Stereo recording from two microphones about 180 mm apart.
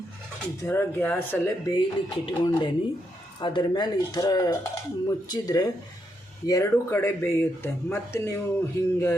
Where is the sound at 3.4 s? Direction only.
25° left (ahead or behind).